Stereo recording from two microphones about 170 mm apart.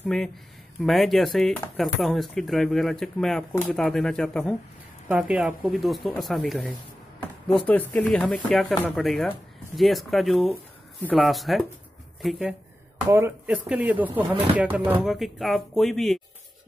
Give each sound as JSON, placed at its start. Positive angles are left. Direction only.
{"t": 0.0, "sound": "speech", "side_deg": 5}
{"t": 5.0, "sound": "speech", "side_deg": -5}